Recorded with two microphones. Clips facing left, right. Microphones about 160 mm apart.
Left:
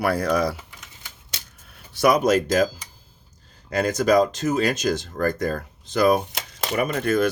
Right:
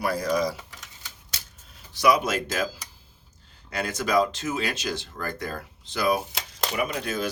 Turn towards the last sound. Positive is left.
turn(degrees=55)  # may be behind; listen again after turning